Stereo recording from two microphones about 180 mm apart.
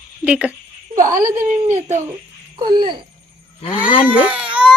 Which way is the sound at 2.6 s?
25° right (ahead or behind).